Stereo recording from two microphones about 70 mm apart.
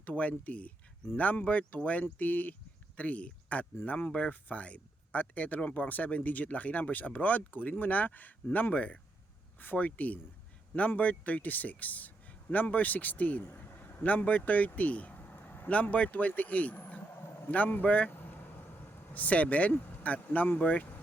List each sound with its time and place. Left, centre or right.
0.0 s speech: centre
18.1 s vehicle: left